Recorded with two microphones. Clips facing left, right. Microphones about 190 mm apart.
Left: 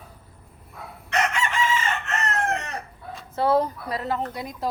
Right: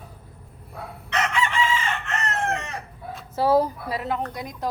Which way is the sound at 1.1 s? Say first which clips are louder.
Even; 45° left (ahead or behind).